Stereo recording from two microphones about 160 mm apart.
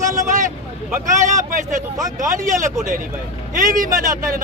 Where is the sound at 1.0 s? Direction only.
55° right (ahead or behind).